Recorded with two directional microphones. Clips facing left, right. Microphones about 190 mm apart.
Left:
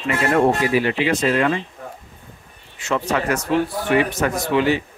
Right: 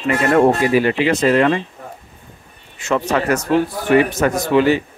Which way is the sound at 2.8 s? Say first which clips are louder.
Right 3 dB; 45° right (ahead or behind).